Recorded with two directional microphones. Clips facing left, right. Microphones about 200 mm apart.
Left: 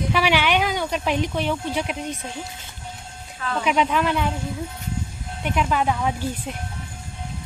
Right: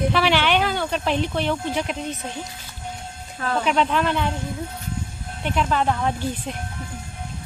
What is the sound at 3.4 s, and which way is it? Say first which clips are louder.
Speech: right 3 dB; 40° right (ahead or behind).